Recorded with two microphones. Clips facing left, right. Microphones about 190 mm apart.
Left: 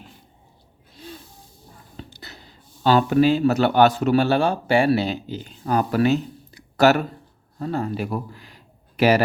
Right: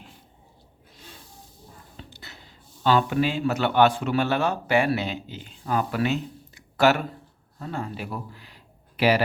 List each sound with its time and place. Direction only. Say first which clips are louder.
2.1 s a man's voice: left 3 dB; 40° left (ahead or behind)